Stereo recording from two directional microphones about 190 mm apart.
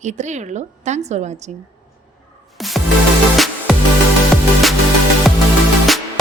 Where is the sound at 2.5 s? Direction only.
Centre (ahead or behind).